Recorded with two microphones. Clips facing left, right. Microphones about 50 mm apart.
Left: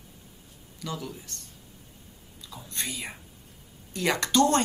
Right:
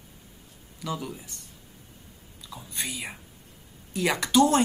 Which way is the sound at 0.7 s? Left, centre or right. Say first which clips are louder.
Right 2 dB; centre.